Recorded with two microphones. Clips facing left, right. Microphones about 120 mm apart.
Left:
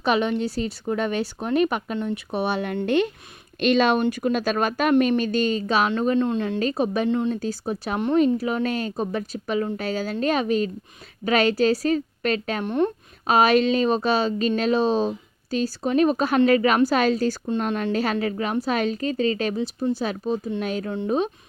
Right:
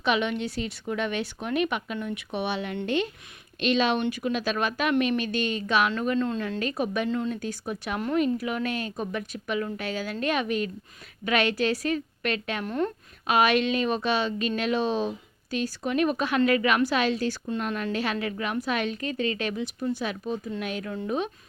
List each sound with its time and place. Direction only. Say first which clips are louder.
0.0 s a woman's voice: left 4 dB; 40° left (ahead or behind); by 6.6 s 20° left (ahead or behind)
6.6 s a woman's voice: left 4 dB; 30° left (ahead or behind)
12.6 s a woman's voice: left 6 dB; 25° left (ahead or behind)
13.2 s a woman's voice: left 4 dB; 35° left (ahead or behind)